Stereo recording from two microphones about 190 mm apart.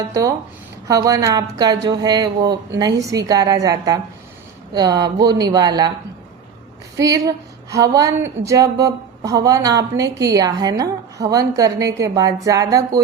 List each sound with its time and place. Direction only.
0.1 s a woman's voice: 15° right (ahead or behind)
6.9 s a woman's voice: 20° right (ahead or behind)